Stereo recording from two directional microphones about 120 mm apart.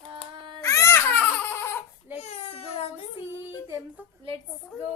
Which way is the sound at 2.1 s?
65° left (ahead or behind).